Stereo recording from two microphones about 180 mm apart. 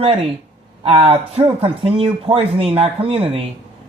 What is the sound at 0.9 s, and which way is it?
Speech, 30° right (ahead or behind).